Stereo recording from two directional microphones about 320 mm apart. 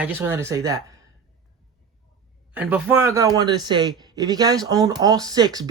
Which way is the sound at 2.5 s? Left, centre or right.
Centre.